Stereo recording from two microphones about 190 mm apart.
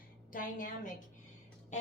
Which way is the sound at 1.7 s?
40° left (ahead or behind).